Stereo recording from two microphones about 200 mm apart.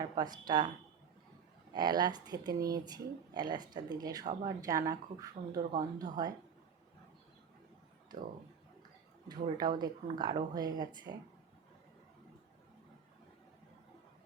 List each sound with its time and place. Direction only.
0.0 s speech: 20° right (ahead or behind)
1.7 s speech: 20° right (ahead or behind)
9.3 s speech: 20° right (ahead or behind)